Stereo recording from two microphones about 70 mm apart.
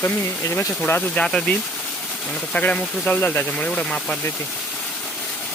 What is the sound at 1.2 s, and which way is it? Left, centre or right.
Speech, centre.